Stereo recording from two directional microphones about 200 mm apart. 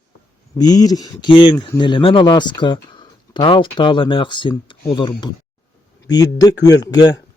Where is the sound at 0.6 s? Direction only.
20° left (ahead or behind).